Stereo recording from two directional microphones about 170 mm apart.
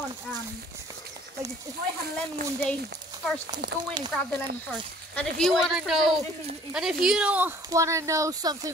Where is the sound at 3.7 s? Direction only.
75° right (ahead or behind).